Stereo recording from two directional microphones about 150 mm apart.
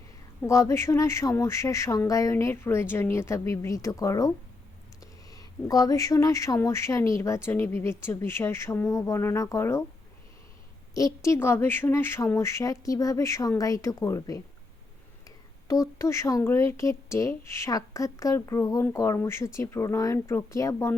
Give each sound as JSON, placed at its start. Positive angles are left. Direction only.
{"t": 0.4, "sound": "speech", "side_deg": 20}
{"t": 5.3, "sound": "speech", "side_deg": 25}
{"t": 10.9, "sound": "speech", "side_deg": 20}
{"t": 15.6, "sound": "speech", "side_deg": 20}